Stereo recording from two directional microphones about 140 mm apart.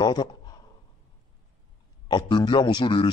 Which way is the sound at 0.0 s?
30° left (ahead or behind).